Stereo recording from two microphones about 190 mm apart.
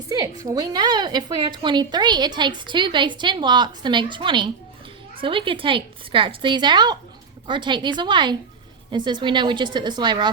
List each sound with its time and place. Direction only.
0.1 s a woman's voice: 20° right (ahead or behind)